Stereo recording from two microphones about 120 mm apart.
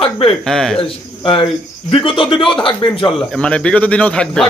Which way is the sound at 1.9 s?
45° left (ahead or behind).